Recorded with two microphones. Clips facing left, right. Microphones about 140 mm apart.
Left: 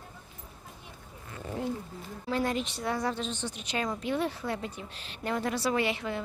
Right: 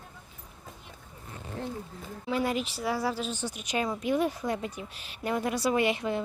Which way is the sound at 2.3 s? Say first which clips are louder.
Right 1 dB; 10° right (ahead or behind).